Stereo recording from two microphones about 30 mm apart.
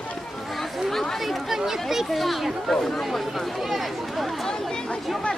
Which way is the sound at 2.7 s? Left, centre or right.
Centre.